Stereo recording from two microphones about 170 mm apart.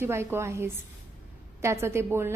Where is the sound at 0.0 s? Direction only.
15° right (ahead or behind).